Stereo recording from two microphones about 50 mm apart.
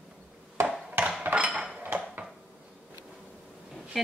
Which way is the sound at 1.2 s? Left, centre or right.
Right.